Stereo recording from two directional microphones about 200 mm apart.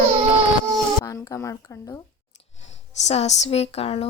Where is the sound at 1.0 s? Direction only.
15° left (ahead or behind).